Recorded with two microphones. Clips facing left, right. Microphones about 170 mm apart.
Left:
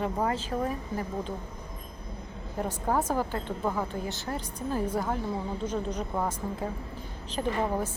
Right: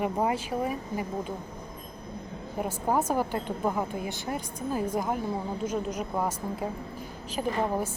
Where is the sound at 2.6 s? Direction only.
10° right (ahead or behind).